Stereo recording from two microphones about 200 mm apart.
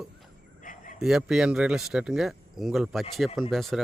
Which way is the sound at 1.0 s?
Centre (ahead or behind).